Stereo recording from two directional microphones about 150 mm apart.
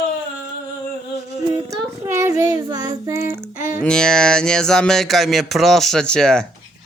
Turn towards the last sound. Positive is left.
turn(degrees=5)  # may be behind; listen again after turning